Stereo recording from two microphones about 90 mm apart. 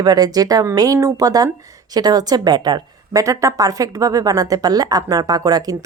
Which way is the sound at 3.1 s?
35° right (ahead or behind).